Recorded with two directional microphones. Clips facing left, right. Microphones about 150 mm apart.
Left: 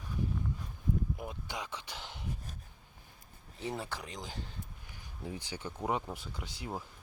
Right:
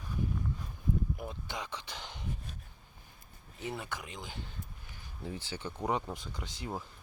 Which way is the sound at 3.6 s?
30° left (ahead or behind).